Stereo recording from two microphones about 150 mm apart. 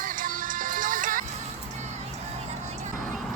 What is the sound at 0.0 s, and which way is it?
Music, 65° right (ahead or behind).